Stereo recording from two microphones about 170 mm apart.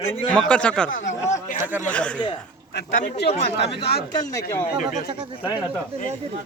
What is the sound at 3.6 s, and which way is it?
Speech, 75° left (ahead or behind).